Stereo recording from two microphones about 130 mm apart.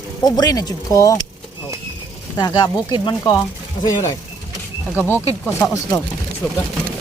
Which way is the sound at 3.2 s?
20° left (ahead or behind).